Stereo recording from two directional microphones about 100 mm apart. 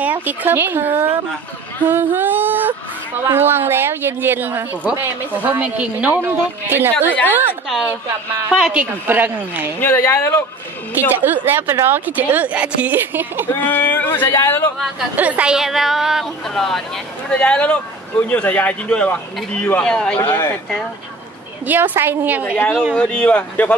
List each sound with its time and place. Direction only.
0.0 s speech: 15° right (ahead or behind)
1.9 s a sound: 20° right (ahead or behind)
3.3 s speech: 20° right (ahead or behind)
8.5 s a woman's voice: 5° right (ahead or behind)
9.0 s speech: 20° right (ahead or behind)
9.8 s speech: 20° left (ahead or behind)
11.1 s speech: 20° right (ahead or behind)
13.5 s speech: 20° left (ahead or behind)
15.1 s a man's voice: 15° right (ahead or behind); by 20.2 s 5° left (ahead or behind)
20.2 s speech: 20° left (ahead or behind)
21.6 s speech: 20° right (ahead or behind)
22.9 s a man's voice: 10° left (ahead or behind)